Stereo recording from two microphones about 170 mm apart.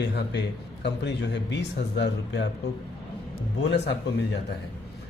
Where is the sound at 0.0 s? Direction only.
85° left.